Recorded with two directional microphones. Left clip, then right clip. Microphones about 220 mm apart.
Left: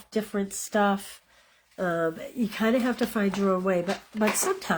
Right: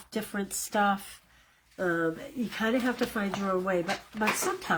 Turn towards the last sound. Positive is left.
turn(degrees=40)  # may be behind; listen again after turning